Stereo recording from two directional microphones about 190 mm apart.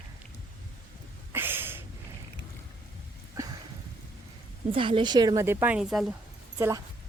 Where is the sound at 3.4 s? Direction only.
15° right (ahead or behind).